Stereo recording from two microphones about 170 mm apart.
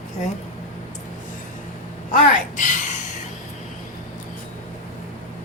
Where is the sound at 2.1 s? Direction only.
50° left (ahead or behind).